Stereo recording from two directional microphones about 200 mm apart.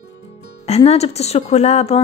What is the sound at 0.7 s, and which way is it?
A woman's voice, 30° left (ahead or behind).